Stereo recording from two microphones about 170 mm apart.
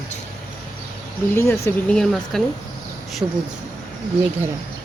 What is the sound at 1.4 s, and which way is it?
Speech, 15° left (ahead or behind).